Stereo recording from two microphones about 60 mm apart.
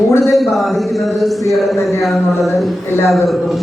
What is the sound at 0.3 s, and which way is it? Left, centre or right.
Speech, centre.